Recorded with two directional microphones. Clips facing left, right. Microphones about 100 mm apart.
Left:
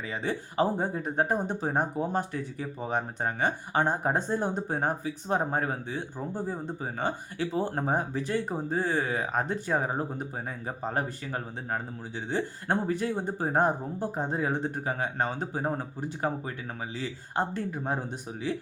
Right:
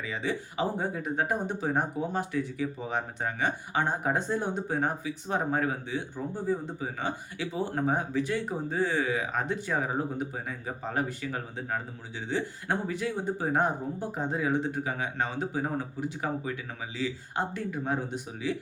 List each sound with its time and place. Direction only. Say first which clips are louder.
0.0 s speech: even; 40° left (ahead or behind)